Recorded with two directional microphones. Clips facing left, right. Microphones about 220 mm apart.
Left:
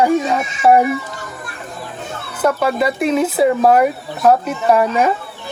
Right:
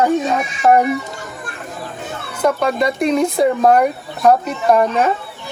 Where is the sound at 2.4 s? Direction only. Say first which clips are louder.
Even; 5° left (ahead or behind).